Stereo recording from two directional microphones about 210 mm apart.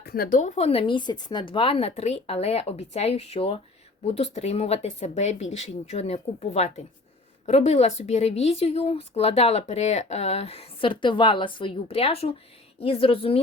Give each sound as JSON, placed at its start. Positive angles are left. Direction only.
{"t": 0.0, "sound": "a woman's voice", "side_deg": 45}